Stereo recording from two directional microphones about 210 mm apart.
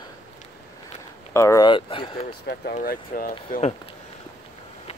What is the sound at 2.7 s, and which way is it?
Speech, 45° left (ahead or behind).